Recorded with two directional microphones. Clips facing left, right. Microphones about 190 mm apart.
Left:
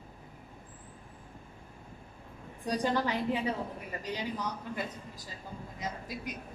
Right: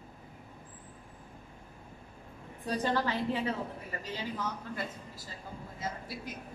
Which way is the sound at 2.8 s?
15° left (ahead or behind).